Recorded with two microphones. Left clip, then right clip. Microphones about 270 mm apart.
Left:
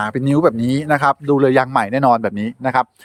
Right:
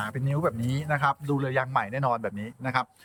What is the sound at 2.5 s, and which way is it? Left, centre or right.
Speech, centre.